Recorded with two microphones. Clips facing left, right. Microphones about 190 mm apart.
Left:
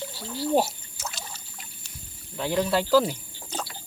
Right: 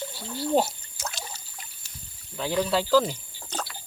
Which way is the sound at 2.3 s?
5° left (ahead or behind).